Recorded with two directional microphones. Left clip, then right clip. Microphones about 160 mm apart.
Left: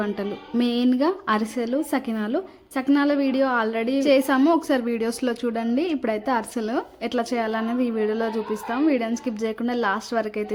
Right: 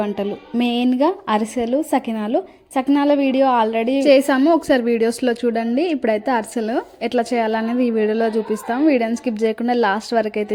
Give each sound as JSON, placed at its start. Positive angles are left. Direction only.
{"t": 0.0, "sound": "a woman's voice", "side_deg": -15}
{"t": 4.4, "sound": "a woman's voice", "side_deg": -10}
{"t": 4.7, "sound": "speech", "side_deg": -25}